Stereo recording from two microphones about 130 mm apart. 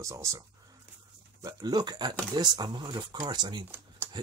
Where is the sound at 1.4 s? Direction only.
30° right (ahead or behind).